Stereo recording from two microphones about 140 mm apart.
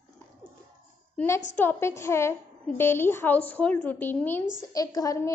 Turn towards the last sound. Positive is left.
turn(degrees=25)  # may be behind; listen again after turning